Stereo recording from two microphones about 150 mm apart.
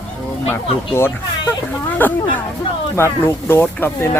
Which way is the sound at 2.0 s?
15° left (ahead or behind).